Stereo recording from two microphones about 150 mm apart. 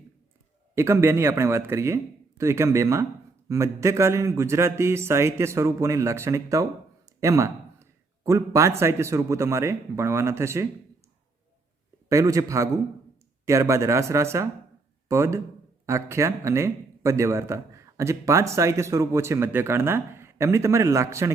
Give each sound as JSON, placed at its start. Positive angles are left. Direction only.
{"t": 0.8, "sound": "speech", "side_deg": -15}
{"t": 7.2, "sound": "a sound", "side_deg": -20}
{"t": 8.8, "sound": "speech", "side_deg": -20}
{"t": 12.0, "sound": "speech", "side_deg": -20}